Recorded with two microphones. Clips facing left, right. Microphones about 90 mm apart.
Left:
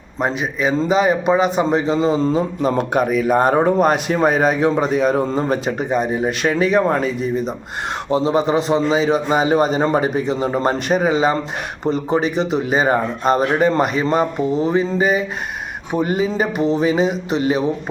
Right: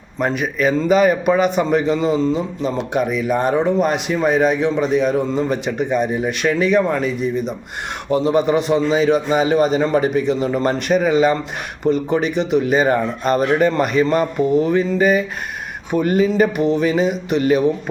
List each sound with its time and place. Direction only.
0.2 s a man's voice: 25° left (ahead or behind)